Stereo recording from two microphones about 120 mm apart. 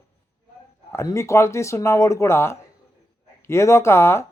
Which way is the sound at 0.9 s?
25° left (ahead or behind).